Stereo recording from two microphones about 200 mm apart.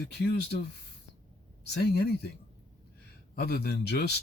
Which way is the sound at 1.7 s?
50° left (ahead or behind).